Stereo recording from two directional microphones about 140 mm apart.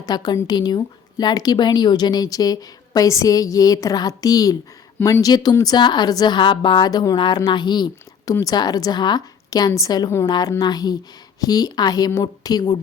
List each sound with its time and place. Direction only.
0.0 s a woman's voice: 30° left (ahead or behind)
4.9 s speech: 15° left (ahead or behind)
5.2 s a woman's voice: 30° left (ahead or behind)